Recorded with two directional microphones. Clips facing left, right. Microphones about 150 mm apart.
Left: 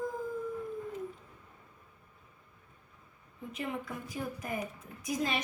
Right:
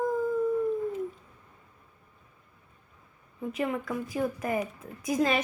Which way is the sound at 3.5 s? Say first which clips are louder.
Right 7 dB; 65° right (ahead or behind).